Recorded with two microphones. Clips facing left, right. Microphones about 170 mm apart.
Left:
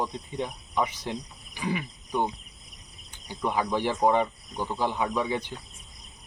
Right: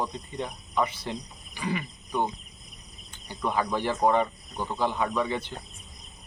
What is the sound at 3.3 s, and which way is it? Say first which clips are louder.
Speech: even; 10° left (ahead or behind).